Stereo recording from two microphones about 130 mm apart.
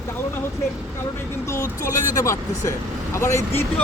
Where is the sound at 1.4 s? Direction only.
20° left (ahead or behind).